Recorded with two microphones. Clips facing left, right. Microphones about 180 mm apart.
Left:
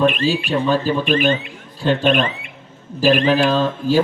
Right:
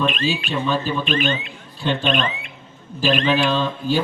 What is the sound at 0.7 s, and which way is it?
Speech, 40° left (ahead or behind).